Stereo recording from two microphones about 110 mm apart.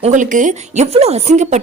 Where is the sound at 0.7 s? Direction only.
80° right.